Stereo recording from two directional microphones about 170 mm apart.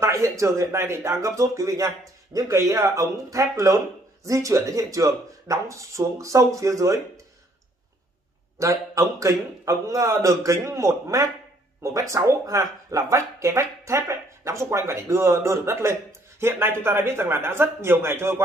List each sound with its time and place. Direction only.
0.0 s speech: 15° right (ahead or behind)
8.5 s speech: 20° right (ahead or behind)